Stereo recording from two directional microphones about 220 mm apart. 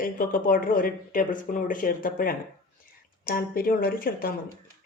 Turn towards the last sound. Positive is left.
turn(degrees=40)  # may be behind; listen again after turning